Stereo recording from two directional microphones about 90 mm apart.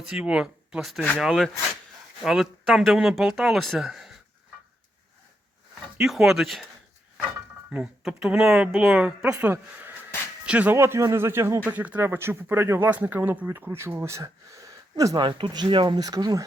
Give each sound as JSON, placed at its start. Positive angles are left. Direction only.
{"t": 0.1, "sound": "speech", "side_deg": -10}
{"t": 6.0, "sound": "speech", "side_deg": -5}
{"t": 7.7, "sound": "speech", "side_deg": -10}
{"t": 10.8, "sound": "speech", "side_deg": -30}
{"t": 15.2, "sound": "speech", "side_deg": -65}
{"t": 16.0, "sound": "speech", "side_deg": -45}